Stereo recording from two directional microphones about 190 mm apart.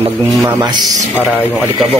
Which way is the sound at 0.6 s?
20° right (ahead or behind).